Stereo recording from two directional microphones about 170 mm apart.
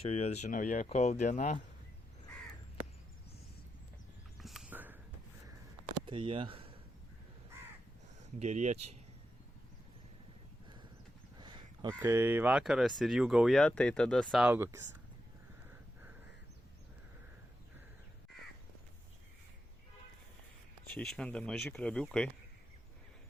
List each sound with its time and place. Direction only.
0.0 s speech: 40° left (ahead or behind)
4.4 s a sound: centre (ahead or behind)
5.9 s speech: 30° right (ahead or behind)
8.4 s speech: 40° right (ahead or behind)
11.3 s crow: 25° right (ahead or behind)
11.9 s speech: 15° right (ahead or behind); by 14.4 s 5° left (ahead or behind)
14.4 s speech: 15° right (ahead or behind)
20.8 s speech: 5° left (ahead or behind)